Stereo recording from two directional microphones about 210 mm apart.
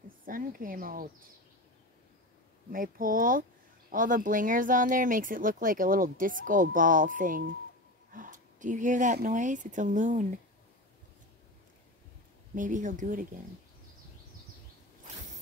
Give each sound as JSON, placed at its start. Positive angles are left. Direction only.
{"t": 0.2, "sound": "speech", "side_deg": -40}
{"t": 2.7, "sound": "speech", "side_deg": -40}
{"t": 12.5, "sound": "speech", "side_deg": -35}